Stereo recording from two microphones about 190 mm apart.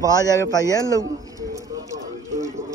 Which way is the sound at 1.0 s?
15° right (ahead or behind).